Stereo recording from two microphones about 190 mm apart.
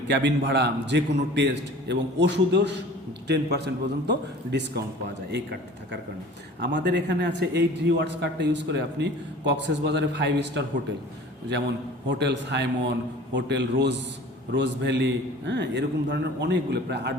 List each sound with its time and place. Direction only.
0.1 s a man's voice: 65° right (ahead or behind)
6.6 s a man's voice: 65° right (ahead or behind)
12.0 s a man's voice: 65° right (ahead or behind)